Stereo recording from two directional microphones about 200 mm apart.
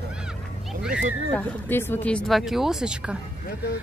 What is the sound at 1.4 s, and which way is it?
Speech, 10° left (ahead or behind).